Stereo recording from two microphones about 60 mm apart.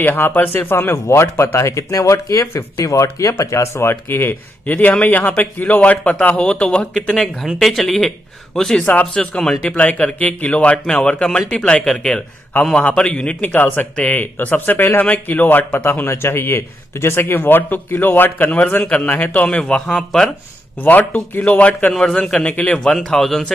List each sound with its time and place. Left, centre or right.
0.0 s a man's voice: left
0.9 s speech: left
1.2 s speech: left
3.9 s a man's voice: left
4.6 s a man's voice: left
7.5 s a man's voice: centre
8.8 s a man's voice: left
9.2 s a man's voice: centre
9.8 s a man's voice: left
13.5 s a man's voice: left
19.4 s a man's voice: centre
20.8 s a man's voice: left
23.0 s a man's voice: centre